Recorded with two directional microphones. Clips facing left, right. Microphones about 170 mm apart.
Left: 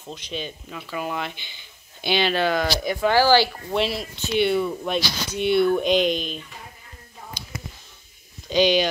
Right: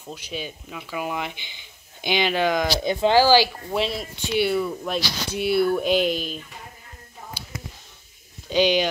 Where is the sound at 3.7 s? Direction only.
Centre (ahead or behind).